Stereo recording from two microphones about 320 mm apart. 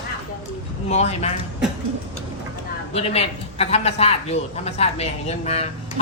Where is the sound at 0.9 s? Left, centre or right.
Centre.